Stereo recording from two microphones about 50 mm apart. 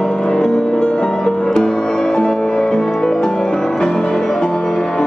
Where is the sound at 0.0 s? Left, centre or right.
Centre.